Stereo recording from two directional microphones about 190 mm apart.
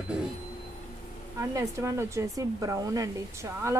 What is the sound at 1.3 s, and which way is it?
Speech, 15° right (ahead or behind).